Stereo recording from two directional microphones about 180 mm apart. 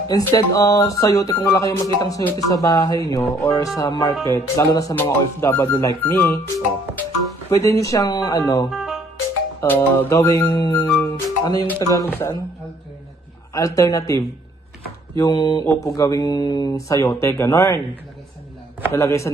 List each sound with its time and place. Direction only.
0.1 s speech: 20° left (ahead or behind)
8.6 s music: centre (ahead or behind)
9.6 s speech: 15° left (ahead or behind)
10.7 s music: 20° left (ahead or behind)
11.6 s speech: 15° left (ahead or behind)
13.5 s speech: 20° left (ahead or behind)
18.9 s speech: 15° left (ahead or behind)